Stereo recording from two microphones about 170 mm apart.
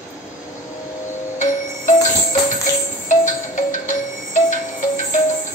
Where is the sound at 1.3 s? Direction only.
50° left (ahead or behind).